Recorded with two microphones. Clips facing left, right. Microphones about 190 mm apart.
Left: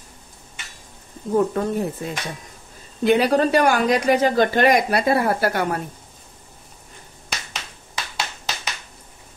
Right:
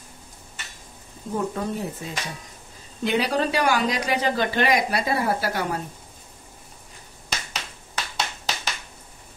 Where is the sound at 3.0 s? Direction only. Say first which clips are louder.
Left 6 dB; 55° left (ahead or behind).